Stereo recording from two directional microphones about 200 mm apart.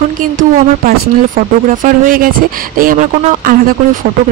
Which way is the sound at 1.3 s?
45° right (ahead or behind).